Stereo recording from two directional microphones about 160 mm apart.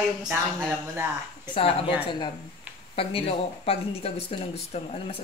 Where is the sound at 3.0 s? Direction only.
35° left (ahead or behind).